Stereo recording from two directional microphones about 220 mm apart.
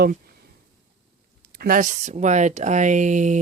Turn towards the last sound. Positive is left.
turn(degrees=-35)  # may be behind; listen again after turning